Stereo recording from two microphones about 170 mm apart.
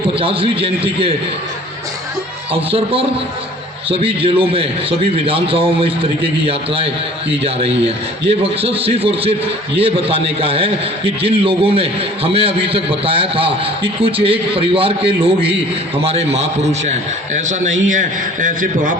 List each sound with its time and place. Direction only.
0.1 s a man's voice: 30° right (ahead or behind)
2.5 s a man's voice: 35° right (ahead or behind); by 18.9 s 50° right (ahead or behind)